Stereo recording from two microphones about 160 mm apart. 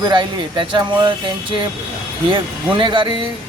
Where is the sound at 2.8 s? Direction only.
30° right (ahead or behind).